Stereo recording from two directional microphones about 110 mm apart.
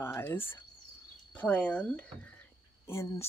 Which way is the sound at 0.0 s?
20° left (ahead or behind).